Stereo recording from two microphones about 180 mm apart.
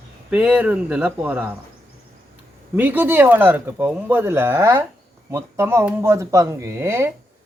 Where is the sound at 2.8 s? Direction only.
10° right (ahead or behind).